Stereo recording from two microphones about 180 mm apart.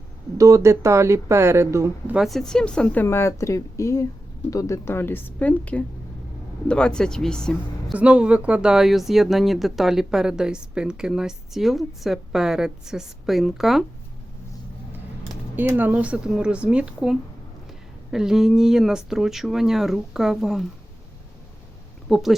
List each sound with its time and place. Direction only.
0.3 s speech: 15° right (ahead or behind)
2.1 s a woman's voice: centre (ahead or behind)
15.5 s speech: 10° right (ahead or behind)
22.1 s speech: centre (ahead or behind)